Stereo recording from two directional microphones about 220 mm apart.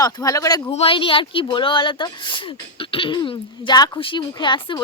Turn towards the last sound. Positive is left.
turn(degrees=20)  # may be behind; listen again after turning